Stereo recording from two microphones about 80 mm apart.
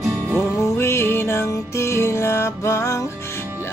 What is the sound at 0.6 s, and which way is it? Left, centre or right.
Music, left.